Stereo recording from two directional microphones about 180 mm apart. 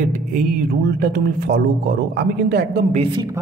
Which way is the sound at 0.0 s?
50° right (ahead or behind).